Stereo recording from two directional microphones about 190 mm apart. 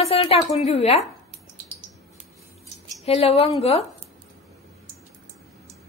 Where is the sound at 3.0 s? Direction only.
30° left (ahead or behind).